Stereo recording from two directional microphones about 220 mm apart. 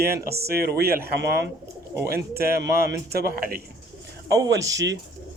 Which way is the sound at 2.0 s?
45° right (ahead or behind).